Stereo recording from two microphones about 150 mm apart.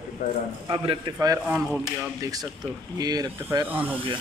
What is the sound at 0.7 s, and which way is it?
Speech, 30° right (ahead or behind).